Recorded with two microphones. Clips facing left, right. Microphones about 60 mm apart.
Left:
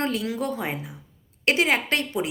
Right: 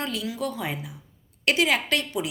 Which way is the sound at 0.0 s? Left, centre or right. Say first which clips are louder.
Left 3 dB; left.